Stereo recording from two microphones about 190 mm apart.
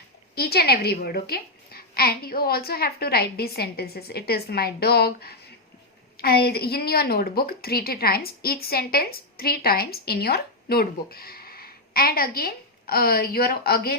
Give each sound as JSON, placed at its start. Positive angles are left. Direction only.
{"t": 0.3, "sound": "a child's voice", "side_deg": 55}